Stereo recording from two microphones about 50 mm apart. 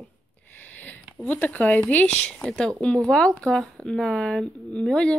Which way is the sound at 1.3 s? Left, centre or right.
Left.